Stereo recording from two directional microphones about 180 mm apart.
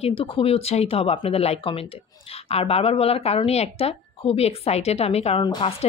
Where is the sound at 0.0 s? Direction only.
30° left (ahead or behind).